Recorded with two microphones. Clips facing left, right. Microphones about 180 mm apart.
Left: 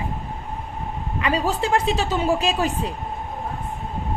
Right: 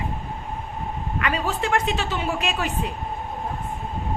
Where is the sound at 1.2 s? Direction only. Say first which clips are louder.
Left 3 dB; 35° left (ahead or behind).